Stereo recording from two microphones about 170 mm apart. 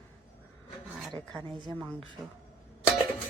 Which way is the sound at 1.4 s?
25° right (ahead or behind).